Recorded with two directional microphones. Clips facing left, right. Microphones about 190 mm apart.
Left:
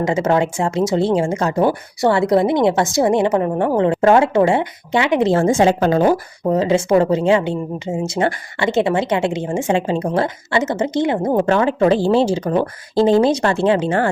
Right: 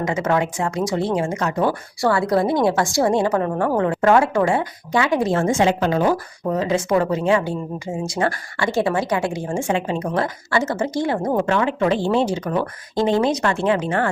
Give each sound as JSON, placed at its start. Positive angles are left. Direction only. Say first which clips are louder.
{"t": 0.0, "sound": "a woman's voice", "louder": "left 4 dB", "side_deg": 30}
{"t": 11.3, "sound": "speech", "louder": "left 6 dB", "side_deg": 35}